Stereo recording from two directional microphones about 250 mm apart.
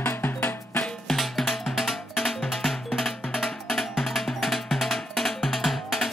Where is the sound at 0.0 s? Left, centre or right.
Centre.